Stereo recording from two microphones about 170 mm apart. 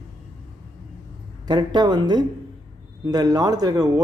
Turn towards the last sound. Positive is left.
turn(degrees=-20)  # may be behind; listen again after turning